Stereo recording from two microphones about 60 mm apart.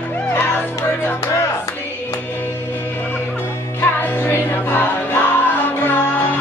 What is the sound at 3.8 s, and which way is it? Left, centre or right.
Music, left.